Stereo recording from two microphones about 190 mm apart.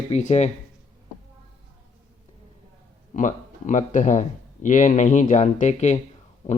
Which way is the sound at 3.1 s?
40° left (ahead or behind).